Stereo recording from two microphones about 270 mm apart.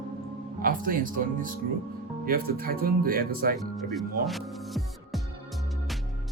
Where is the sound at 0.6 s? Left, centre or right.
Right.